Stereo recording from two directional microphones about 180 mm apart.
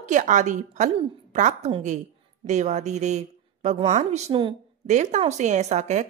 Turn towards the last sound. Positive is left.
turn(degrees=-40)  # may be behind; listen again after turning